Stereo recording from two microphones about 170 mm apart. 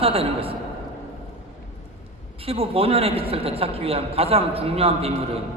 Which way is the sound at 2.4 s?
35° right (ahead or behind).